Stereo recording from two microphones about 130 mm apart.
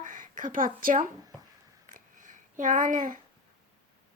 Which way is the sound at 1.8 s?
90° right.